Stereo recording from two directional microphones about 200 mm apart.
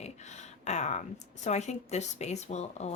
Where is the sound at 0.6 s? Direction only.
35° left (ahead or behind).